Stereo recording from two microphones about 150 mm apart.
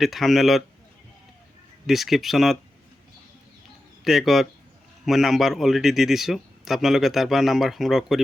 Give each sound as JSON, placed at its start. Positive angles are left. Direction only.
{"t": 0.0, "sound": "a man's voice", "side_deg": 0}
{"t": 1.9, "sound": "a man's voice", "side_deg": 0}
{"t": 4.0, "sound": "a man's voice", "side_deg": 0}